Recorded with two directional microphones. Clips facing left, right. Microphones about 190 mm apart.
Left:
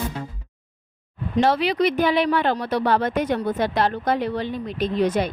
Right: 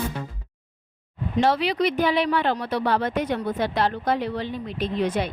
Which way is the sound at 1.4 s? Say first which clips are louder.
Left 2 dB; 50° left (ahead or behind).